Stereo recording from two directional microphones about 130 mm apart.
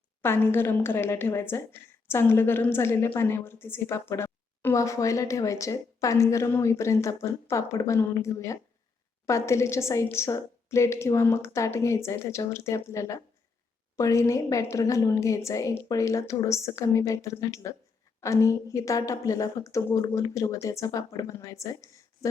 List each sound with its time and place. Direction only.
0.2 s a woman's voice: 15° left (ahead or behind)